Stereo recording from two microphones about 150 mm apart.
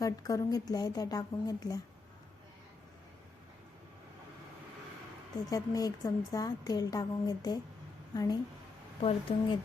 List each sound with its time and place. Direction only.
0.0 s a woman's voice: 25° left (ahead or behind)
5.5 s a woman's voice: 25° left (ahead or behind)
9.0 s speech: 40° left (ahead or behind)